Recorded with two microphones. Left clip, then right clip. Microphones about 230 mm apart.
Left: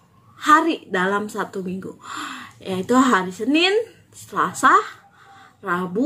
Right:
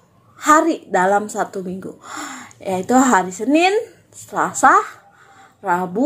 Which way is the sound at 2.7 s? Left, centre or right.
Centre.